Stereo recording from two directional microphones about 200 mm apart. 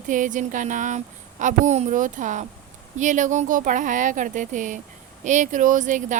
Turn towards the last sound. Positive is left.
turn(degrees=-40)  # may be behind; listen again after turning